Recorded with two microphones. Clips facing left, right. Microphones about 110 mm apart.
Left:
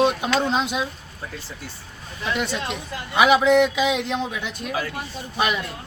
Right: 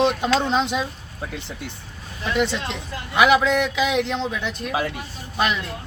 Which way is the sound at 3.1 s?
20° left (ahead or behind).